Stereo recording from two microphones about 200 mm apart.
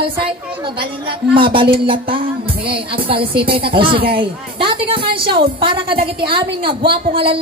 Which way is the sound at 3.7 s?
25° right (ahead or behind).